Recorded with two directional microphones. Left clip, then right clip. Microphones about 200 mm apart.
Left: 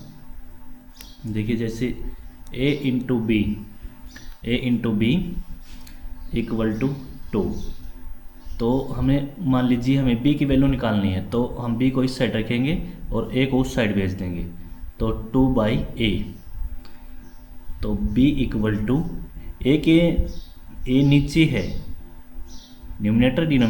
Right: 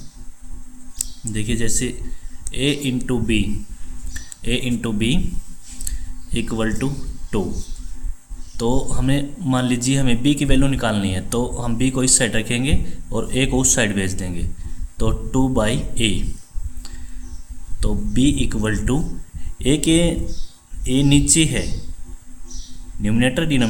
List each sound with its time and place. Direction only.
0.9 s speech: 35° right (ahead or behind)
4.4 s speech: 30° right (ahead or behind)
6.3 s speech: 40° right (ahead or behind)
8.5 s speech: 40° right (ahead or behind)
17.7 s speech: 35° right (ahead or behind)
23.0 s speech: 30° right (ahead or behind)